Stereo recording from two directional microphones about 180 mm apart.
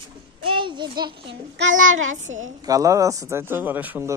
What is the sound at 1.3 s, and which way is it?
A child's voice, 80° right.